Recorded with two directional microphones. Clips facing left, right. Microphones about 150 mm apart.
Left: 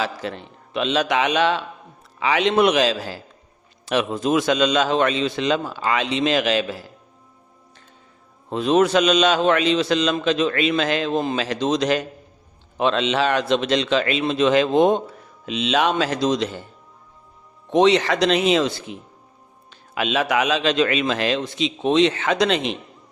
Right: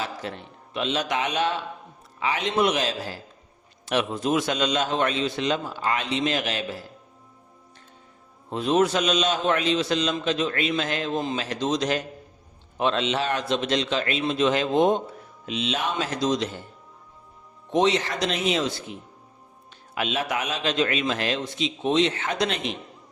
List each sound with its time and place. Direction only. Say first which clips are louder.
0.0 s a man's voice: left 5 dB; 90° left
8.4 s a man's voice: left 4 dB; 90° left; by 16.5 s 75° left (ahead or behind)
17.7 s a man's voice: left 6 dB; 80° left